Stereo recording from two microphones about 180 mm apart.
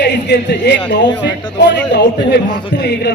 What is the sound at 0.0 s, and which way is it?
A man's voice, 70° left (ahead or behind).